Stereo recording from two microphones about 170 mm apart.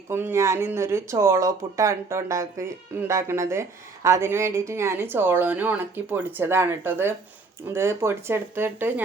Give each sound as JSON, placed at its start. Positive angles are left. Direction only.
{"t": 0.1, "sound": "speech", "side_deg": -15}